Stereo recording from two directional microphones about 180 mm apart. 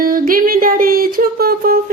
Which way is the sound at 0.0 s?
50° right (ahead or behind).